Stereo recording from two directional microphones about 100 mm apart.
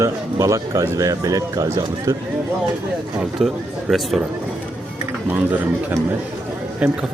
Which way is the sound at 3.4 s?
Centre (ahead or behind).